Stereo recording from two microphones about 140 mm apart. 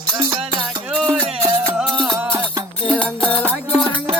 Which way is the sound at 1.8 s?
5° left (ahead or behind).